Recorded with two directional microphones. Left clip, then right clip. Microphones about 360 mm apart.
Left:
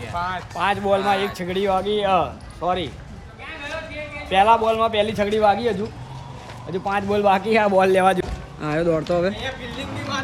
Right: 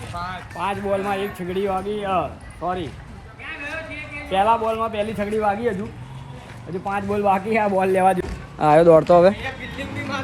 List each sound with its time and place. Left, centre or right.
0.1 s a sound: left
0.6 s a man's voice: centre
4.3 s a man's voice: centre
6.8 s a man's voice: centre